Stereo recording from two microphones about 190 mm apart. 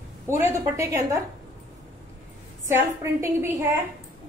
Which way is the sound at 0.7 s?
15° right (ahead or behind).